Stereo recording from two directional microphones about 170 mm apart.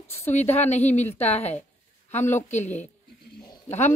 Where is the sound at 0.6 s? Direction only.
40° left (ahead or behind).